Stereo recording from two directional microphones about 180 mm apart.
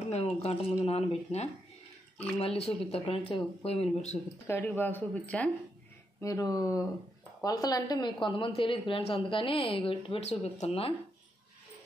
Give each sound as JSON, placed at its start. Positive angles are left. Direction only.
{"t": 0.0, "sound": "speech", "side_deg": 35}
{"t": 4.5, "sound": "speech", "side_deg": 10}
{"t": 6.2, "sound": "speech", "side_deg": 20}